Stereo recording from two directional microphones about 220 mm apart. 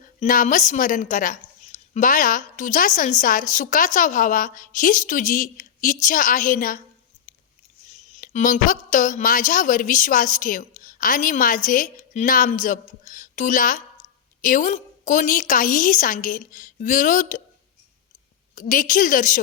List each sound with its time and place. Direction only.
0.2 s a woman's voice: 35° left (ahead or behind)
8.1 s a woman's voice: 35° left (ahead or behind)
18.5 s a woman's voice: 35° left (ahead or behind)